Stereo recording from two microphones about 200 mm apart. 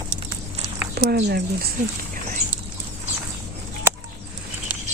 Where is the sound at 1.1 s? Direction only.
55° right (ahead or behind).